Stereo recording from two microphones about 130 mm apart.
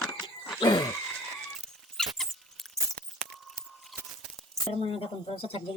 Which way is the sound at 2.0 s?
Centre (ahead or behind).